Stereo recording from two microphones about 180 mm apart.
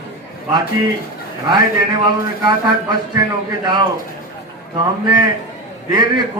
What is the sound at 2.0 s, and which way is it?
Speech, 25° right (ahead or behind).